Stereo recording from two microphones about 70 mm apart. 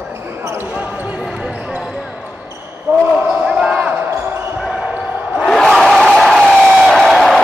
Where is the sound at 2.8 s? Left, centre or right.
Right.